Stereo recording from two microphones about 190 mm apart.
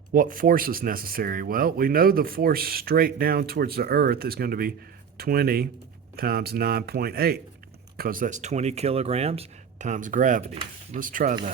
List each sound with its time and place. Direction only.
0.1 s speech: 45° right (ahead or behind)
11.0 s speech: 45° right (ahead or behind)